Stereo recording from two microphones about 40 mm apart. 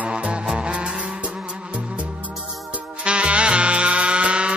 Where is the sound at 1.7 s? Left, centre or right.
Right.